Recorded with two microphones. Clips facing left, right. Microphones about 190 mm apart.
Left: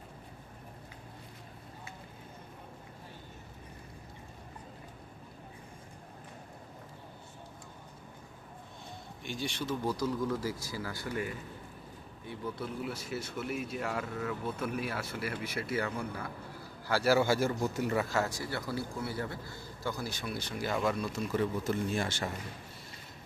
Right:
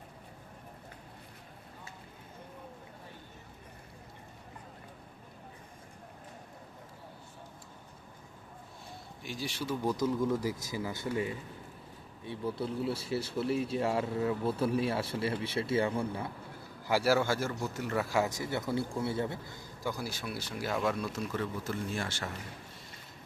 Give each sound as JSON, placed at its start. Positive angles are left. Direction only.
{"t": 9.2, "sound": "speech", "side_deg": 0}
{"t": 9.8, "sound": "speech", "side_deg": -20}
{"t": 16.8, "sound": "a man's voice", "side_deg": -15}
{"t": 17.1, "sound": "speech", "side_deg": 10}
{"t": 17.9, "sound": "speech", "side_deg": -5}
{"t": 18.2, "sound": "a man's voice", "side_deg": -20}
{"t": 21.3, "sound": "speech", "side_deg": 20}